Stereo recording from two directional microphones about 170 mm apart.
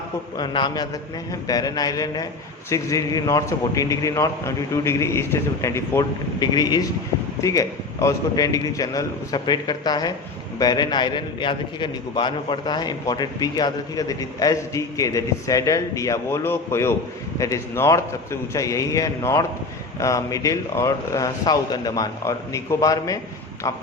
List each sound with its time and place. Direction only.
0.3 s a man's voice: 25° left (ahead or behind)